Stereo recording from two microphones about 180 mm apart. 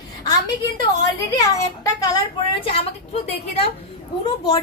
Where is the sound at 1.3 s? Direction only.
20° left (ahead or behind).